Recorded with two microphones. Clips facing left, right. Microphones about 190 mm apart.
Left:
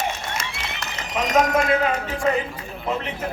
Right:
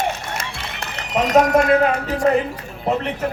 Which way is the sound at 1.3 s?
60° right (ahead or behind).